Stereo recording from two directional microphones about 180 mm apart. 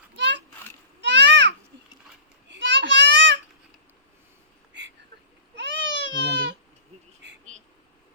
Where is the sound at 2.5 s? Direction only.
75° right (ahead or behind).